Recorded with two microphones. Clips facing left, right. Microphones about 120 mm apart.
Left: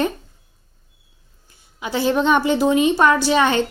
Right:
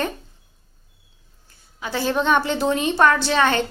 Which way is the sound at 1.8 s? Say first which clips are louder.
Left 3 dB; 15° left (ahead or behind).